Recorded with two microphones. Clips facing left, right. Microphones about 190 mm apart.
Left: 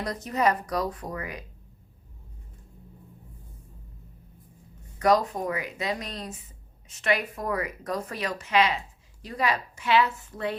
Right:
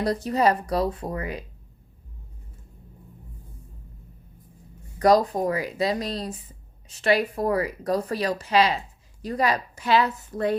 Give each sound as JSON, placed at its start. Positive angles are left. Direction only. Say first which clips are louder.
{"t": 0.0, "sound": "speech", "louder": "right 4 dB", "side_deg": -35}
{"t": 4.9, "sound": "speech", "louder": "right 4 dB", "side_deg": -35}